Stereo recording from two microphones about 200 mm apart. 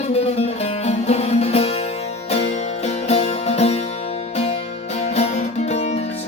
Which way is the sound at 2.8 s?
30° left (ahead or behind).